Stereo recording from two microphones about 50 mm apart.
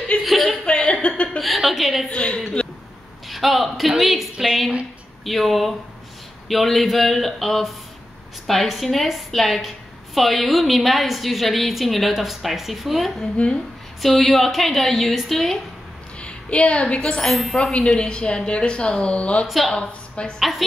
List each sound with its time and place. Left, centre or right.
0.2 s chuckle: centre
0.7 s a sound: left
1.4 s a sound: centre
2.0 s a woman's voice: left
3.3 s a woman's voice: centre
13.4 s a woman's voice: left
14.0 s a woman's voice: centre
16.2 s a woman's voice: left
17.2 s a woman's voice: centre
17.6 s a woman's voice: centre
19.4 s a woman's voice: centre
19.7 s a woman's voice: centre
20.3 s a woman's voice: centre